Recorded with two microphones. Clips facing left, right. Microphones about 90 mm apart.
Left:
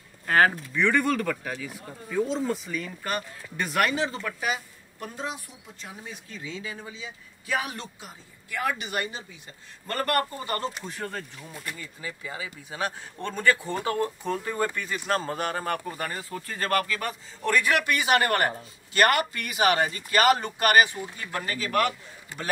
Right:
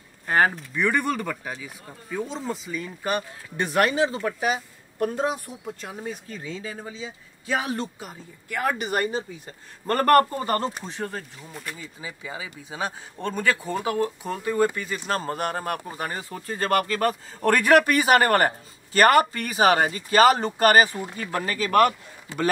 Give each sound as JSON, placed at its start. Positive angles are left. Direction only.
{"t": 0.3, "sound": "speech", "side_deg": -10}
{"t": 3.0, "sound": "speech", "side_deg": -20}
{"t": 4.2, "sound": "speech", "side_deg": -30}
{"t": 4.9, "sound": "speech", "side_deg": -50}
{"t": 11.8, "sound": "speech", "side_deg": -15}
{"t": 15.9, "sound": "speech", "side_deg": -20}
{"t": 16.8, "sound": "speech", "side_deg": -45}
{"t": 21.6, "sound": "speech", "side_deg": -50}